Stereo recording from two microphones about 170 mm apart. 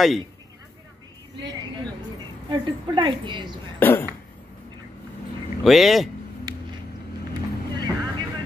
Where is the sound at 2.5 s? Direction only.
30° right (ahead or behind).